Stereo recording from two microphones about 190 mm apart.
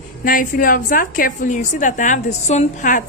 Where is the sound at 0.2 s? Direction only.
45° left (ahead or behind).